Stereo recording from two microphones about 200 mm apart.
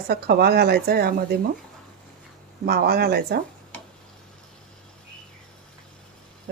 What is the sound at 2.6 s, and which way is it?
Speech, 50° right (ahead or behind).